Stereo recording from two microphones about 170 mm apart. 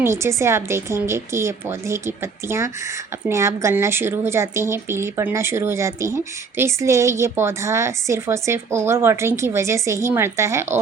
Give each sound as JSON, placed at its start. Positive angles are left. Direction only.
{"t": 0.0, "sound": "speech", "side_deg": -15}